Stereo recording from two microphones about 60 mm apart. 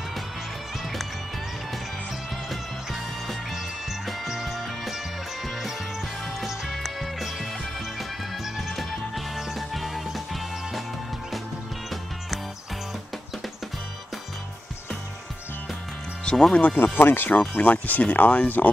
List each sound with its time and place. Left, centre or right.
2.5 s music: centre
16.3 s speech: centre
16.6 s speech: left